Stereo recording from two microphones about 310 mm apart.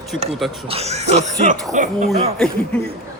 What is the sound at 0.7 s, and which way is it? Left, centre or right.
Music, centre.